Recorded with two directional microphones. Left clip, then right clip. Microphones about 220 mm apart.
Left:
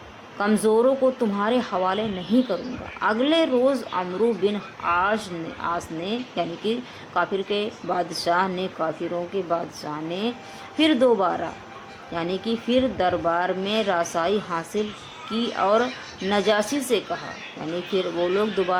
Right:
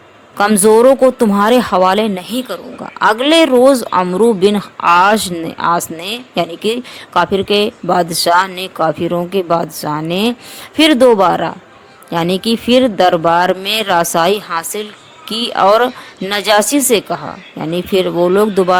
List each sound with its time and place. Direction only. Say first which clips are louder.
0.3 s speech: right 11 dB; 45° right (ahead or behind)